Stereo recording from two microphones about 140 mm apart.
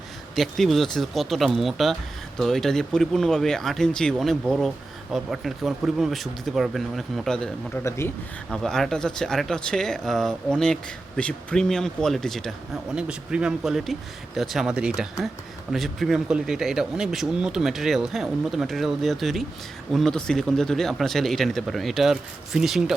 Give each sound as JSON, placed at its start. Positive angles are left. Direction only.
{"t": 0.3, "sound": "speech", "side_deg": 0}
{"t": 7.9, "sound": "speech", "side_deg": 20}
{"t": 8.4, "sound": "speech", "side_deg": 5}